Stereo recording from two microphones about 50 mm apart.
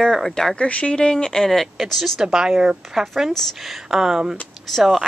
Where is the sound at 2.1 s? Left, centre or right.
Centre.